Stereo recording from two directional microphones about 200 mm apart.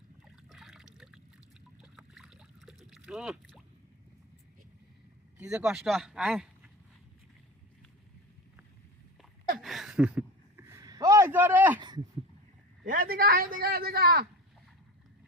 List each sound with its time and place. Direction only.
0.4 s liquid: centre (ahead or behind)
1.8 s boat: 5° right (ahead or behind)
5.4 s speech: 5° right (ahead or behind)
9.6 s a sound: centre (ahead or behind)
12.8 s a man's voice: 45° right (ahead or behind)